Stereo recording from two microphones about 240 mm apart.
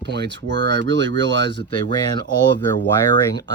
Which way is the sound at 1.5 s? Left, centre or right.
Centre.